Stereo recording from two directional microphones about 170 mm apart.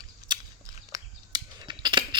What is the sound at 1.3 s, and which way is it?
Scissors, 25° right (ahead or behind).